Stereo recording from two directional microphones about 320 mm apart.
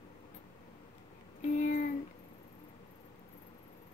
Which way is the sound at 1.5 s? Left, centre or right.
Left.